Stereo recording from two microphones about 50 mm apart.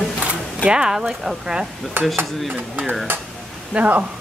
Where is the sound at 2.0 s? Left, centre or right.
Right.